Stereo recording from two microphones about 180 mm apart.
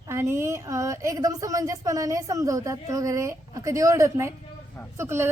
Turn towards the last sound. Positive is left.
turn(degrees=-15)  # may be behind; listen again after turning